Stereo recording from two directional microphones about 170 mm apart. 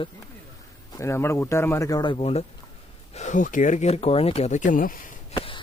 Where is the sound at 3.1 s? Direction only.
45° left (ahead or behind).